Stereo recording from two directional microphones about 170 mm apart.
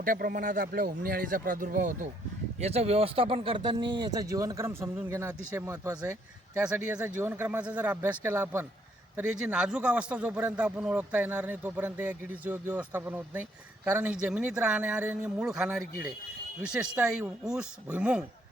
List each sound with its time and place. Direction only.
0.0 s speech: 60° right (ahead or behind)
2.6 s speech: 40° right (ahead or behind); by 6.6 s 20° right (ahead or behind)
6.6 s a man's voice: 5° right (ahead or behind)